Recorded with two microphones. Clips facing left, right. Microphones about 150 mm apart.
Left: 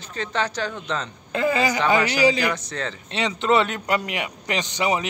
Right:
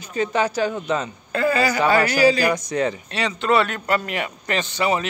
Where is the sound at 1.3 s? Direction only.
20° left (ahead or behind).